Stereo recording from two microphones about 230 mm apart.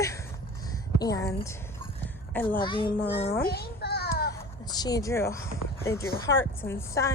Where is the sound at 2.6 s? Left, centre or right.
Left.